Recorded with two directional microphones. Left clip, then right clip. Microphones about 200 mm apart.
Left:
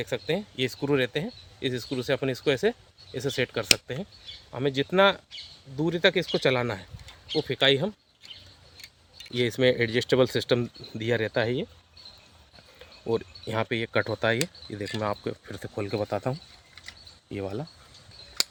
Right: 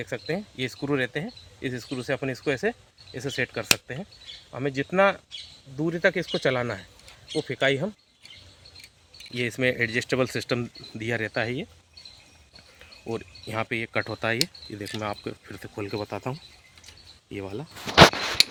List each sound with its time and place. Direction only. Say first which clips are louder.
0.0 s speech: left 2 dB; 30° left (ahead or behind)
9.4 s speech: left 2 dB; 40° left (ahead or behind)
13.1 s speech: left 5 dB; 45° left (ahead or behind)